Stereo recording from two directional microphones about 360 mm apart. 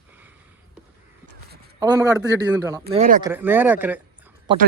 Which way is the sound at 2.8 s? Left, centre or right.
Right.